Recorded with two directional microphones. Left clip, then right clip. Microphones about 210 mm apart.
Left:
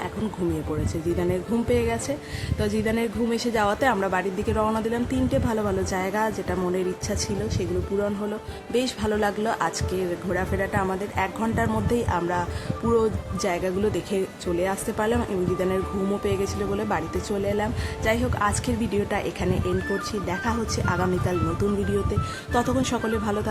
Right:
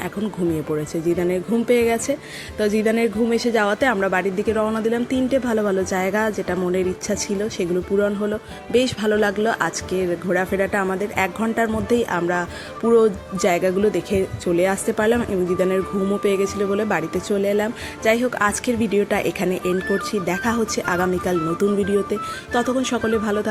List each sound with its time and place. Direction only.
1.2 s speech: 15° right (ahead or behind)
12.8 s speech: centre (ahead or behind)
13.4 s speech: 20° right (ahead or behind)